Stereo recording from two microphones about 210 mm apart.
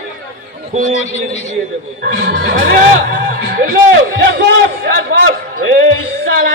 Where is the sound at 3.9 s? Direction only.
55° right (ahead or behind).